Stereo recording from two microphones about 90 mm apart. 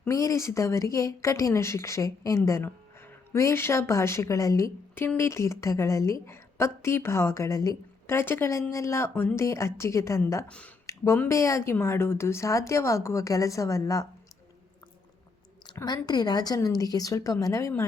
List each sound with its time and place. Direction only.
0.1 s speech: 35° left (ahead or behind)
4.9 s a woman's voice: 25° left (ahead or behind)
8.0 s a woman's voice: 25° left (ahead or behind)
10.8 s a sound: 30° left (ahead or behind)
11.3 s speech: 35° left (ahead or behind)
15.6 s a woman's voice: 45° left (ahead or behind)